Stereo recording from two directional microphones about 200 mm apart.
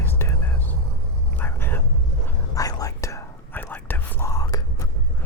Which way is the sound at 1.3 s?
10° left (ahead or behind).